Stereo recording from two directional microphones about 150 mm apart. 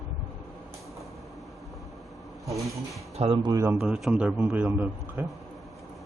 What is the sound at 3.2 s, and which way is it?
Speech, 35° right (ahead or behind).